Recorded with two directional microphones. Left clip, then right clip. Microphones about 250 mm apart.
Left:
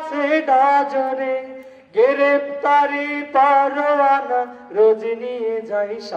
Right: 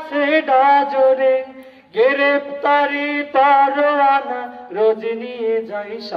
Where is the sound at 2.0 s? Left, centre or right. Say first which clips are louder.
Even; left.